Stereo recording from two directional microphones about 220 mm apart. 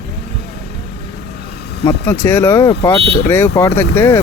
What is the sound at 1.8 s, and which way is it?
A man's voice, 15° left (ahead or behind).